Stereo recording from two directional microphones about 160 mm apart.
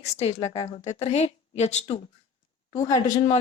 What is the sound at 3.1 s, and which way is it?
Speech, 40° left (ahead or behind).